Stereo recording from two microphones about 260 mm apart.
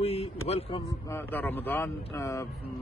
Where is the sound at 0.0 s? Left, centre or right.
Left.